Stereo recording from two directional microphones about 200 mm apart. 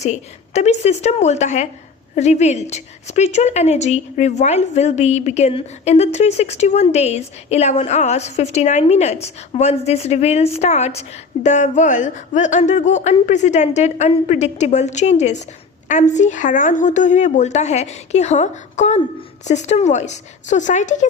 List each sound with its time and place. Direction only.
0.0 s a woman's voice: 35° left (ahead or behind)